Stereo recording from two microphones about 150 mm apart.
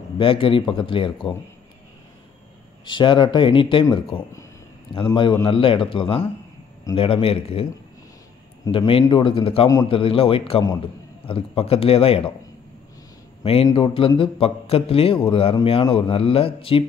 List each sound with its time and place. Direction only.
0.2 s a man's voice: 35° left (ahead or behind)
2.8 s a man's voice: 30° left (ahead or behind)
8.7 s a man's voice: 35° left (ahead or behind)
13.4 s a man's voice: 40° left (ahead or behind)